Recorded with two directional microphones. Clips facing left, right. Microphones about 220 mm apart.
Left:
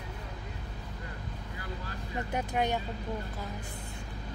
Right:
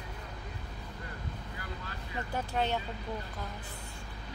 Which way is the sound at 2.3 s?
15° left (ahead or behind).